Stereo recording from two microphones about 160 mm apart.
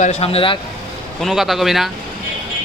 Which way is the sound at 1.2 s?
Centre (ahead or behind).